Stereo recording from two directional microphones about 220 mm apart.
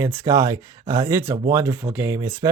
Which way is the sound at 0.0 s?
10° right (ahead or behind).